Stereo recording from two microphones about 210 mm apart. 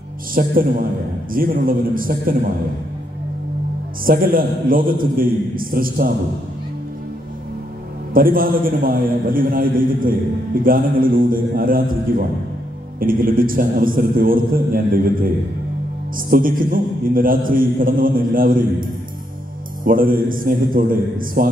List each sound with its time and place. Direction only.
0.3 s a man's voice: 45° right (ahead or behind)
4.0 s a man's voice: 45° right (ahead or behind)
8.1 s a man's voice: 40° right (ahead or behind)
16.3 s a man's voice: 40° right (ahead or behind)